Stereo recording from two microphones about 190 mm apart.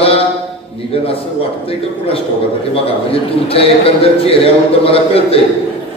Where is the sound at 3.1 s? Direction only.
30° left (ahead or behind).